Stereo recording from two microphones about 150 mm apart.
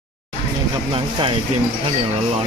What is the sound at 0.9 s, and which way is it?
Speech, 35° right (ahead or behind).